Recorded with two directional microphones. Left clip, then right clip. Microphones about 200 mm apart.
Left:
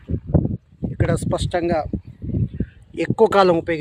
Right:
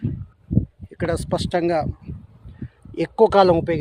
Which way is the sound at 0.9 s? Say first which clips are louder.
Left 1 dB; centre (ahead or behind).